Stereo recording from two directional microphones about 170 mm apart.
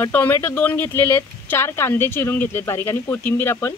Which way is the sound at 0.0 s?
10° left (ahead or behind).